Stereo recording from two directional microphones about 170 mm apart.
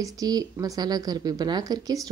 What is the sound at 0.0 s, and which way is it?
A woman's voice, 20° right (ahead or behind).